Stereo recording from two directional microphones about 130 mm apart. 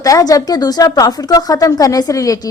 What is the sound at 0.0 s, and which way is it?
A woman's voice, 25° left (ahead or behind).